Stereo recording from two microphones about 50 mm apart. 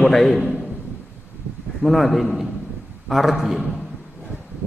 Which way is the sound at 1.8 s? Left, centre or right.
Centre.